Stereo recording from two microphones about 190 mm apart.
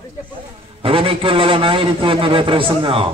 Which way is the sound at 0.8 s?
30° right (ahead or behind).